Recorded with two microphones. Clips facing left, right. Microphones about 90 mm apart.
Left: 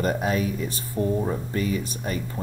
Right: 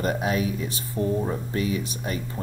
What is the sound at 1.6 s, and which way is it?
Speech, 45° left (ahead or behind).